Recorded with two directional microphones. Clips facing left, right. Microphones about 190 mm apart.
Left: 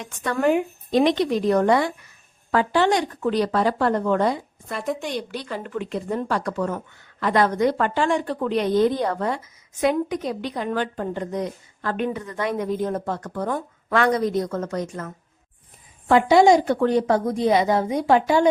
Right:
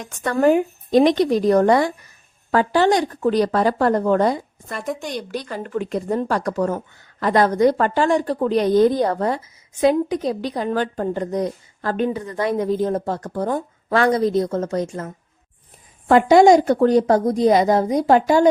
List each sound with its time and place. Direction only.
0.3 s speech: 40° right (ahead or behind)
4.7 s a woman's voice: 5° left (ahead or behind)
5.3 s speech: 45° right (ahead or behind)
16.0 s speech: 45° right (ahead or behind)